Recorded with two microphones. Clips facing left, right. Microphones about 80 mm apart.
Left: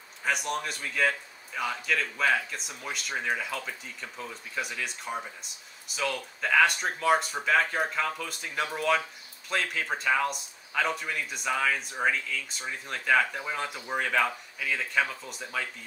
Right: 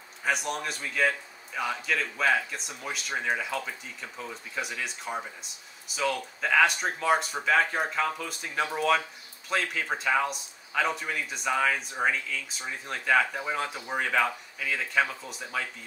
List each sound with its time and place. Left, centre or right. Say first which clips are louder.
0.2 s speech: even; centre